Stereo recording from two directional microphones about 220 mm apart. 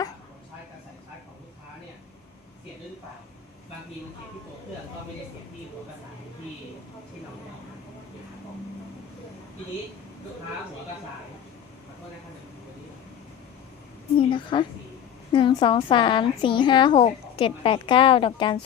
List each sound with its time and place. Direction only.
14.2 s a woman's voice: 20° left (ahead or behind)